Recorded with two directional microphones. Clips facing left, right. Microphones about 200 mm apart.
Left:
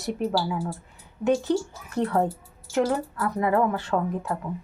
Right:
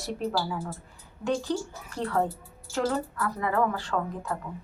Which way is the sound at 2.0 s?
20° left (ahead or behind).